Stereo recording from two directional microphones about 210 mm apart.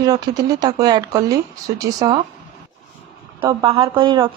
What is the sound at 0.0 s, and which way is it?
Speech, 15° right (ahead or behind).